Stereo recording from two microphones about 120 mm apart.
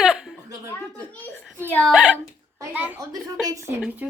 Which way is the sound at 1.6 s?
15° left (ahead or behind).